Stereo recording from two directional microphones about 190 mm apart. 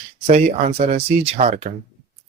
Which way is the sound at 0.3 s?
40° right (ahead or behind).